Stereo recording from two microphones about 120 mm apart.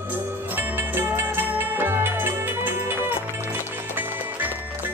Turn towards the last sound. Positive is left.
turn(degrees=-20)  # may be behind; listen again after turning